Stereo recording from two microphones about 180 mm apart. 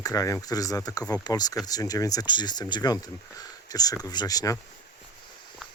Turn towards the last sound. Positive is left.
turn(degrees=20)  # may be behind; listen again after turning